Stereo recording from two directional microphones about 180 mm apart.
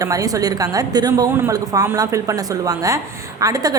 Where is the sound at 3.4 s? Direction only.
20° right (ahead or behind).